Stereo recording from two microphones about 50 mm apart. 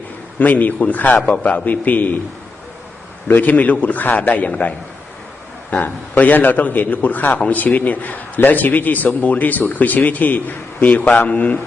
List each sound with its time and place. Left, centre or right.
0.3 s speech: left
3.2 s speech: left
5.7 s speech: left